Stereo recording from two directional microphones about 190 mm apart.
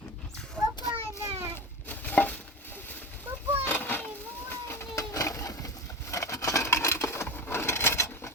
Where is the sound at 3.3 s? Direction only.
10° right (ahead or behind).